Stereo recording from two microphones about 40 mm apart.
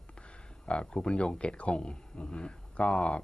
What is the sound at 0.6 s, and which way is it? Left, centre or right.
Speech, left.